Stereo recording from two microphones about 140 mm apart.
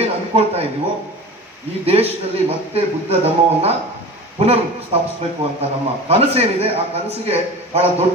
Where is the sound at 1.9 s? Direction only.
45° right (ahead or behind).